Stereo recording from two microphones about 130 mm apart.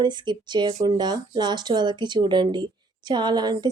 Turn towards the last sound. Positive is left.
turn(degrees=-35)  # may be behind; listen again after turning